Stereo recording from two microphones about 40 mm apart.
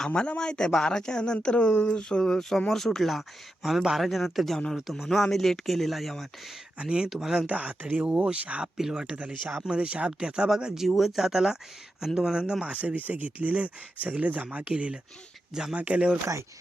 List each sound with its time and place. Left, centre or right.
0.2 s speech: left; by 6.2 s centre
6.7 s speech: right
7.4 s speech: right
8.0 s speech: right
8.8 s speech: centre
9.1 s speech: right
9.6 s speech: right
10.8 s speech: centre
12.6 s speech: right
14.7 s speech: right